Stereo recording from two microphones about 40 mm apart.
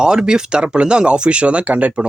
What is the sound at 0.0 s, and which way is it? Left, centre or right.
Speech, centre.